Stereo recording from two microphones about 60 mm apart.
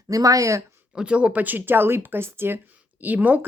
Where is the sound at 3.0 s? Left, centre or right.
Right.